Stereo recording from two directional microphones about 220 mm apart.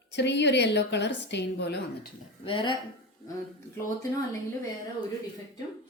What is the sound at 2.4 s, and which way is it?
Speech, 20° left (ahead or behind).